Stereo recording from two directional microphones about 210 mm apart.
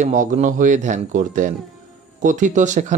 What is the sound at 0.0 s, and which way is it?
Speech, 35° right (ahead or behind).